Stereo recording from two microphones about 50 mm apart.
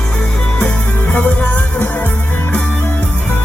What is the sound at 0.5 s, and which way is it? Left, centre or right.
Music, left.